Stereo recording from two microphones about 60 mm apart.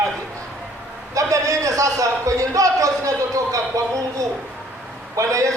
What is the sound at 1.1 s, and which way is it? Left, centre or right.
A man's voice, right.